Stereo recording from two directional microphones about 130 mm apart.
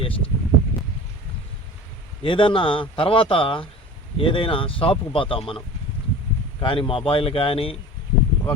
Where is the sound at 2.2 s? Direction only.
40° left (ahead or behind).